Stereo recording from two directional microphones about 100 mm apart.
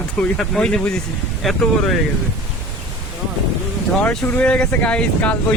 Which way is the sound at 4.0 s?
15° left (ahead or behind).